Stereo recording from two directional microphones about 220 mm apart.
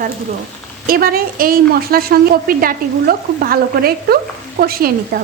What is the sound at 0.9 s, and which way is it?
A woman's voice, 40° right (ahead or behind).